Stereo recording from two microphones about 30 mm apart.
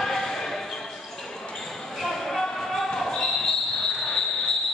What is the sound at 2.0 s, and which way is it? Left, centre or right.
Basketball bounce, centre.